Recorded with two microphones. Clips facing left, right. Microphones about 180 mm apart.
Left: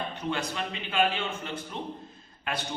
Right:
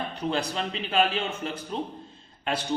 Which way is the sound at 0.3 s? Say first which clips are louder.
Right 4 dB; 35° right (ahead or behind).